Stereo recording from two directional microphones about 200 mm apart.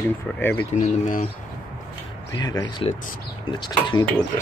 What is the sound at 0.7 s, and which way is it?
Speech, 40° left (ahead or behind).